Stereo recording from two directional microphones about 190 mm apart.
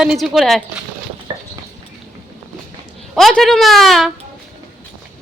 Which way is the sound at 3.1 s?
Centre (ahead or behind).